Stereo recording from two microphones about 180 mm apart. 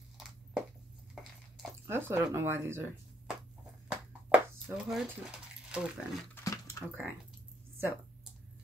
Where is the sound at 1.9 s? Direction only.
15° right (ahead or behind).